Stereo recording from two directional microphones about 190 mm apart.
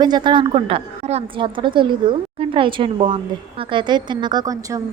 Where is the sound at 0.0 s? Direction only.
25° right (ahead or behind).